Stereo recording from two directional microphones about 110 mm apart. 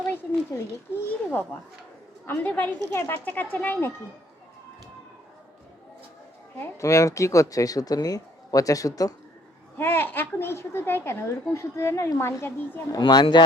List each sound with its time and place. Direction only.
0.1 s a child's voice: 20° left (ahead or behind)
6.6 s speech: 30° left (ahead or behind)
9.7 s a woman's voice: 20° left (ahead or behind)
13.0 s speech: 40° left (ahead or behind)